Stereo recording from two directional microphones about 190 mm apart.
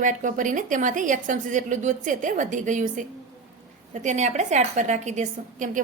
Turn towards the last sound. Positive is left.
turn(degrees=-40)  # may be behind; listen again after turning